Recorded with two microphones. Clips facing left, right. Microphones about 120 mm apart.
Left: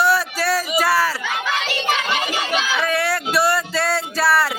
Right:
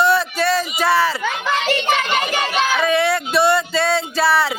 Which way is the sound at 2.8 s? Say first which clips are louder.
Right 4 dB; 5° left (ahead or behind).